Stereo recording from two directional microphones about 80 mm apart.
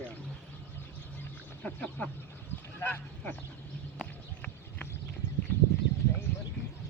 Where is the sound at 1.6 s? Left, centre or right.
Centre.